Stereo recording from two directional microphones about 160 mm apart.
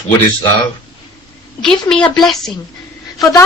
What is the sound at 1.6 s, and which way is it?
Speech, 5° left (ahead or behind).